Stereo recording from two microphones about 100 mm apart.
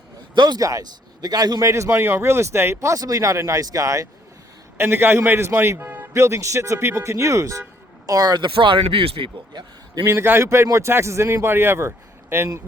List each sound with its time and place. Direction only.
0.3 s a man's voice: 45° right (ahead or behind)
1.7 s a man's voice: 30° right (ahead or behind)
4.8 s a man's voice: 20° right (ahead or behind); by 9.3 s 65° right (ahead or behind)
9.5 s a man's voice: 40° right (ahead or behind)
10.1 s a man's voice: 25° right (ahead or behind)